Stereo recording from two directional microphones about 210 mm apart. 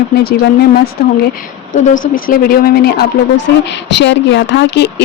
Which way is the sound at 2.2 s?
45° left (ahead or behind).